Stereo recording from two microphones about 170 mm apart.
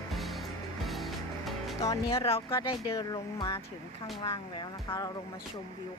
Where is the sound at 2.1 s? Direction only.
35° left (ahead or behind).